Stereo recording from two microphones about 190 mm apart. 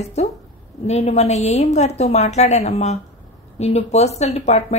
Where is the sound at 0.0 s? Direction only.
35° left (ahead or behind).